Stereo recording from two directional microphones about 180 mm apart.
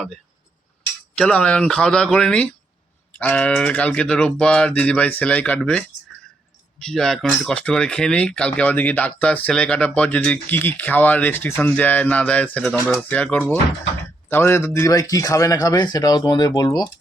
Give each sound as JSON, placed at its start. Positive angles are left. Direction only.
{"t": 1.1, "sound": "speech", "side_deg": 5}